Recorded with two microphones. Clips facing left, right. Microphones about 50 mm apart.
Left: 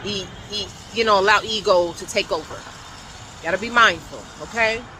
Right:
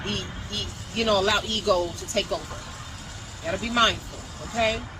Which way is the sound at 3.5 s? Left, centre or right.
Left.